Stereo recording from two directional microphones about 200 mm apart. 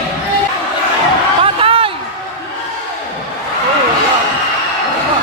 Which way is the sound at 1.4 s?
25° right (ahead or behind).